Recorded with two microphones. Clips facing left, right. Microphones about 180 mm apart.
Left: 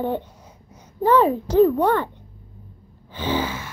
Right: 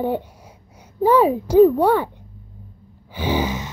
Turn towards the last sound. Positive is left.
turn(degrees=-15)  # may be behind; listen again after turning